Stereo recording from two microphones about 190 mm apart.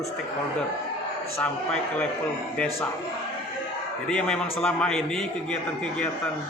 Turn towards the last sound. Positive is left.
turn(degrees=5)  # may be behind; listen again after turning